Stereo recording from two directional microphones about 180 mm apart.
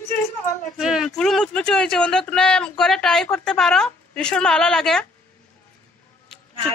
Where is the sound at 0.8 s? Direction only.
5° right (ahead or behind).